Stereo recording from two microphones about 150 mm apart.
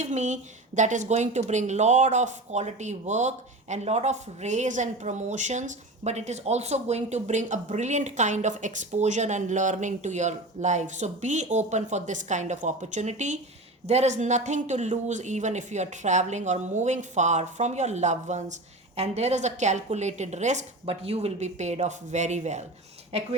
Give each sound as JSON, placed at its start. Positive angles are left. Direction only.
{"t": 0.0, "sound": "speech", "side_deg": -50}